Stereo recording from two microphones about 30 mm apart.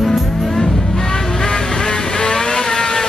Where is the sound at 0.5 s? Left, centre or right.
Centre.